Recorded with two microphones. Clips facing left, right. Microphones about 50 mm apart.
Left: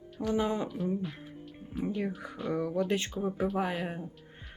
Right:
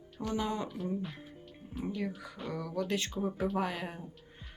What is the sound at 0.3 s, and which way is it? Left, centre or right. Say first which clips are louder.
Speech: left 4 dB; left.